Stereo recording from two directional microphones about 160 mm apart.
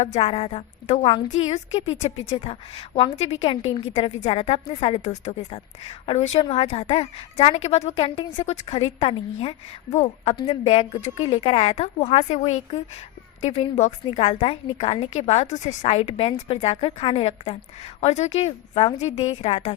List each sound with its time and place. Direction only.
0.0 s a woman's voice: 40° left (ahead or behind)
10.3 s a woman's voice: 30° left (ahead or behind)
10.6 s a woman's voice: 40° left (ahead or behind)